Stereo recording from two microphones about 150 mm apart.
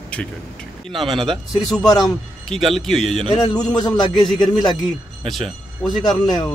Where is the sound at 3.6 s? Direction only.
25° left (ahead or behind).